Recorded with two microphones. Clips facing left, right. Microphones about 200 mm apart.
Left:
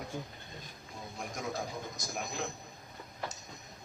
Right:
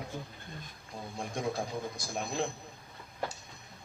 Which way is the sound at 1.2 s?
30° right (ahead or behind).